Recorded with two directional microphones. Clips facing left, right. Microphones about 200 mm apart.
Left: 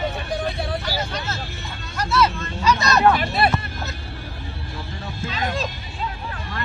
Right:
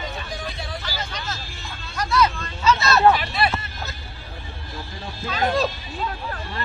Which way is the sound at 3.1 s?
50° left (ahead or behind).